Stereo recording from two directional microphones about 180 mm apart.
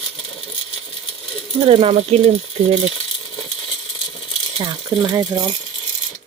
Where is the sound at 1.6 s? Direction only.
35° right (ahead or behind).